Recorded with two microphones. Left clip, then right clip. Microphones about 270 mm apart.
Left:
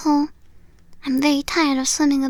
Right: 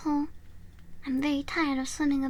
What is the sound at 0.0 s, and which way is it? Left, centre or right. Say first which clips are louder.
Speech: left 11 dB; left.